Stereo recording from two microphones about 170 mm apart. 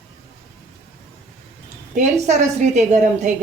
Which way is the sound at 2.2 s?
40° right (ahead or behind).